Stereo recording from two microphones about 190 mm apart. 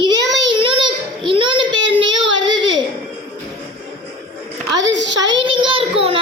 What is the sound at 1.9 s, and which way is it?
Baby cry, 25° right (ahead or behind).